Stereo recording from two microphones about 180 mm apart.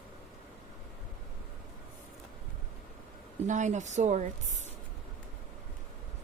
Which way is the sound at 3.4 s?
40° right (ahead or behind).